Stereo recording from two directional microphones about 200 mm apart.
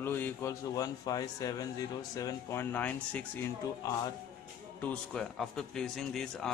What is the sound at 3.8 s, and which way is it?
Speech, 20° left (ahead or behind).